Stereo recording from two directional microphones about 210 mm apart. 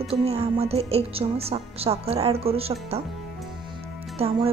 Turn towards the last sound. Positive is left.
turn(degrees=-30)  # may be behind; listen again after turning